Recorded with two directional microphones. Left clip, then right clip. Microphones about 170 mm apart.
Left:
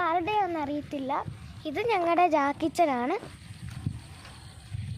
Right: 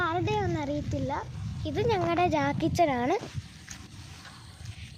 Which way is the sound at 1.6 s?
30° left (ahead or behind).